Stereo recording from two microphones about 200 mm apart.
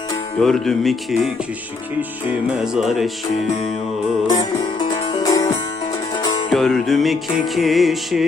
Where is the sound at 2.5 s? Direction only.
Centre (ahead or behind).